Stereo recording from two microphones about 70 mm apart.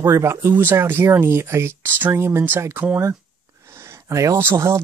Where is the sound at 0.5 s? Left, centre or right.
Right.